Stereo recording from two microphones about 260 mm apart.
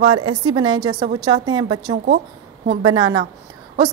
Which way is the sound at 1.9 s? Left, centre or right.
Right.